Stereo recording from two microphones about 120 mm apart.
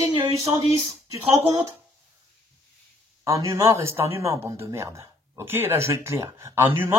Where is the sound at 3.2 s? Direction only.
25° right (ahead or behind).